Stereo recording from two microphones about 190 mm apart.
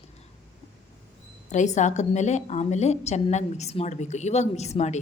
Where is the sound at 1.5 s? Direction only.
40° left (ahead or behind).